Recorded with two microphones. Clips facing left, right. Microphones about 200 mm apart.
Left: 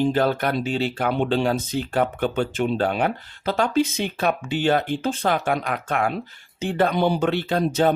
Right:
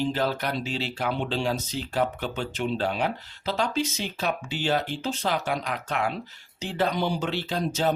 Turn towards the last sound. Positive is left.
turn(degrees=55)  # may be behind; listen again after turning